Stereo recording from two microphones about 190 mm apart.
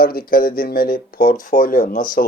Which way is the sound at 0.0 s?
50° left (ahead or behind).